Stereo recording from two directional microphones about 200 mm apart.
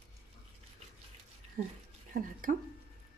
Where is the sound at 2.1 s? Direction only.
45° right (ahead or behind).